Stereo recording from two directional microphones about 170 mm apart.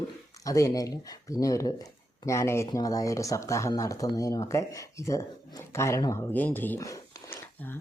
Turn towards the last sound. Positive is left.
turn(degrees=15)  # may be behind; listen again after turning